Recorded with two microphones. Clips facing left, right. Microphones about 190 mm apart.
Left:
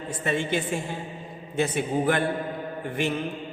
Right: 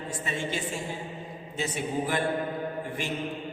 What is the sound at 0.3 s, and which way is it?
Speech, 60° left (ahead or behind).